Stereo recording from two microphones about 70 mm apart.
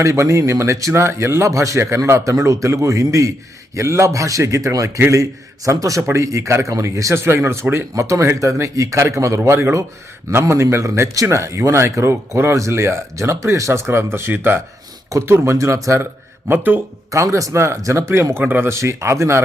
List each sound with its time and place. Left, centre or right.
0.0 s speech: right
4.9 s speech: right
5.2 s speech: right
15.3 s speech: right
16.5 s speech: right
17.1 s speech: right
18.4 s speech: right
18.8 s speech: right